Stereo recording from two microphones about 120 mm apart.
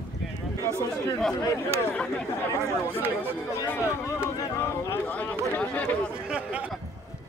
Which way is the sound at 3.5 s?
20° left (ahead or behind).